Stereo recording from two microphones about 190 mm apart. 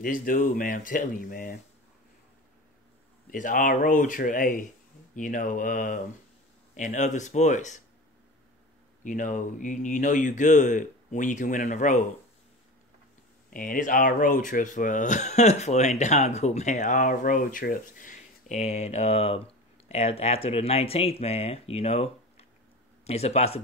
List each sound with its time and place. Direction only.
0.0 s speech: 45° left (ahead or behind)
3.3 s speech: 45° left (ahead or behind)
9.0 s speech: 40° left (ahead or behind)
13.5 s speech: 45° left (ahead or behind)